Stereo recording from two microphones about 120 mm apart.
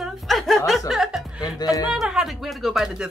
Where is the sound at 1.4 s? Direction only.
35° left (ahead or behind).